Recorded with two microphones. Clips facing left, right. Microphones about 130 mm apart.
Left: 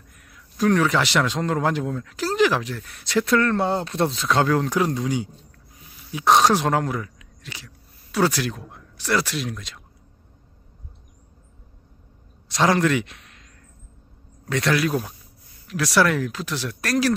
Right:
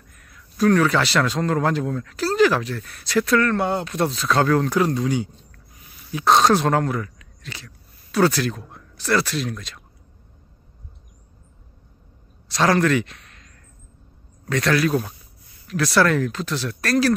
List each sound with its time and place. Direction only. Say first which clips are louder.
0.2 s speech: right 2 dB; 15° left (ahead or behind)
12.4 s a man's voice: right 1 dB; 15° left (ahead or behind)